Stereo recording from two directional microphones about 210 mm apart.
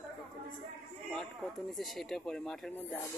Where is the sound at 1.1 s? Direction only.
Centre (ahead or behind).